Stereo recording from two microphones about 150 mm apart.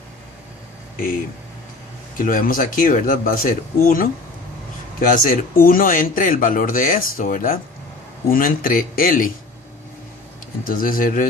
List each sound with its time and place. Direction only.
2.1 s speech: 65° left (ahead or behind)
10.7 s speech: 70° left (ahead or behind)